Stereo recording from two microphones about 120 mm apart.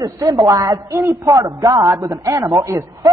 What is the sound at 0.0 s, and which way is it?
A woman's voice, 30° right (ahead or behind).